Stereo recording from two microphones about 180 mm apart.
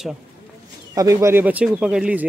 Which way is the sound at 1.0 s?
15° right (ahead or behind).